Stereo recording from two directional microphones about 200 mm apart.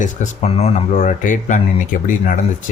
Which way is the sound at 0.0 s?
35° left (ahead or behind).